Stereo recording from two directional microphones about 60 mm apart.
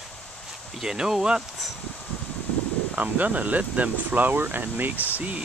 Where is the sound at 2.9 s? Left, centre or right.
Right.